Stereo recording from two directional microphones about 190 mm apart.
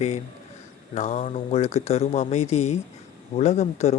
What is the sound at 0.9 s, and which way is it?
Speech, 40° left (ahead or behind).